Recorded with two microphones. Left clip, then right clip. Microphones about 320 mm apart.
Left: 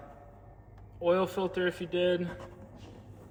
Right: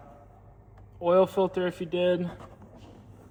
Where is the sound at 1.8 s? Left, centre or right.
Right.